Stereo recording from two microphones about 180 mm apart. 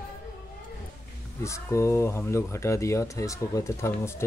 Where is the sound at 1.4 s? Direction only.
15° left (ahead or behind).